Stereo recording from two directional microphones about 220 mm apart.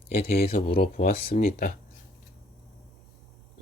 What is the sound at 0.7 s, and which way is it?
Speech, 45° left (ahead or behind).